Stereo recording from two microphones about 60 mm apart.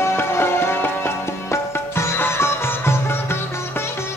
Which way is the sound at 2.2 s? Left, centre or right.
Left.